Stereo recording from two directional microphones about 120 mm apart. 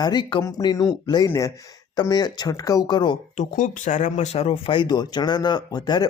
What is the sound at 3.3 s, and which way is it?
Speech, 90° left.